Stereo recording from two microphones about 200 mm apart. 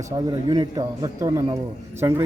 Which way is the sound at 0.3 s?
20° right (ahead or behind).